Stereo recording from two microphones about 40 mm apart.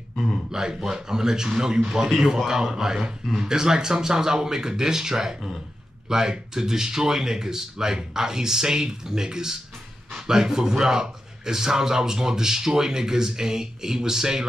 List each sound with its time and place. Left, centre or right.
0.5 s a man's voice: centre